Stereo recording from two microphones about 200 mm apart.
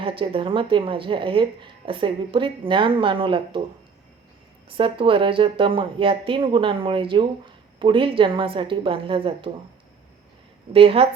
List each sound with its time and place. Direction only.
0.0 s speech: 25° right (ahead or behind)
4.7 s speech: 25° right (ahead or behind)
10.7 s speech: 30° right (ahead or behind)